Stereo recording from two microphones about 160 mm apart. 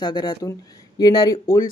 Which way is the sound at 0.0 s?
30° left (ahead or behind).